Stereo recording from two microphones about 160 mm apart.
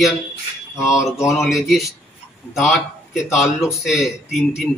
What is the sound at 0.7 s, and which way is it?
Mantra, 20° left (ahead or behind).